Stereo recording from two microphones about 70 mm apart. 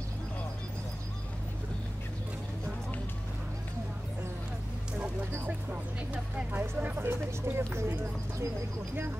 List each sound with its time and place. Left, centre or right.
5.5 s speech: right